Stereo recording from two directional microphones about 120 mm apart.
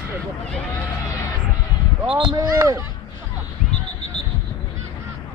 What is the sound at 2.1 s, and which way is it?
Speech, 40° right (ahead or behind).